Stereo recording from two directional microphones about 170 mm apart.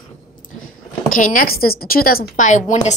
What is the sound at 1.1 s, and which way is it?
Speech, 50° left (ahead or behind).